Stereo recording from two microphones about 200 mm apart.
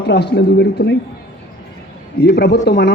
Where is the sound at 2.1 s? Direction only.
55° left (ahead or behind).